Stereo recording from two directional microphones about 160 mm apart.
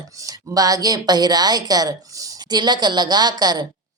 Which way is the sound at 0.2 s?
20° right (ahead or behind).